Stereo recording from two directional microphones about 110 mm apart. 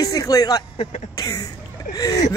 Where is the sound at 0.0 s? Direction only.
30° left (ahead or behind).